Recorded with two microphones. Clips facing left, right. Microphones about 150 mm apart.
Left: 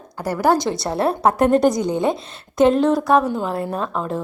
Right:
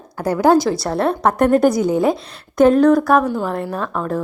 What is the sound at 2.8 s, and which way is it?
A woman's voice, 25° left (ahead or behind).